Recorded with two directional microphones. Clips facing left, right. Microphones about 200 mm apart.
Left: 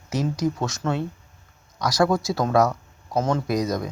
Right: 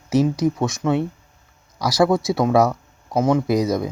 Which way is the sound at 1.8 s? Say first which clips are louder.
Right 3 dB; 5° right (ahead or behind).